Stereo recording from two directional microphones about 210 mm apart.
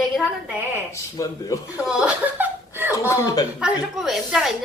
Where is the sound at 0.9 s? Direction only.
15° left (ahead or behind).